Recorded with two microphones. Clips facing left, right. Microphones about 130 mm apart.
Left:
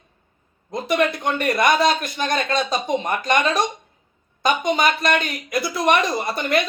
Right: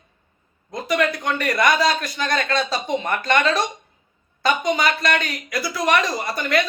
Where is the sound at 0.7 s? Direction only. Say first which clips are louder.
Left 1 dB; 25° left (ahead or behind).